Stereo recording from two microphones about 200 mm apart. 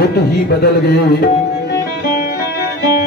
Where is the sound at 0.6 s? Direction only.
50° left (ahead or behind).